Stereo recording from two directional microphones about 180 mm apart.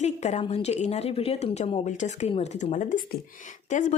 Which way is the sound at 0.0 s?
40° left (ahead or behind).